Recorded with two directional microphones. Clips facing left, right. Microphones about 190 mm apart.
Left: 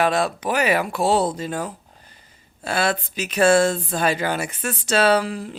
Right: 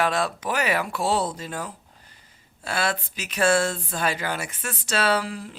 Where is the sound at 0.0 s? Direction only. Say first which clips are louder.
Left 4 dB; 15° left (ahead or behind).